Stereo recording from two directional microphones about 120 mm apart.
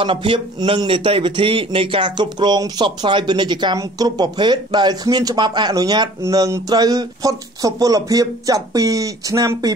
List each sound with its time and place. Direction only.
0.0 s speech: 45° right (ahead or behind); by 9.7 s 30° right (ahead or behind)